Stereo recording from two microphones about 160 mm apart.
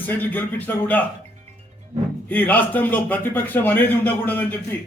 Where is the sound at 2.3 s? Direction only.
10° left (ahead or behind).